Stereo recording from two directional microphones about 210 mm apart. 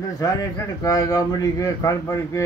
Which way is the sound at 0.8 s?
15° left (ahead or behind).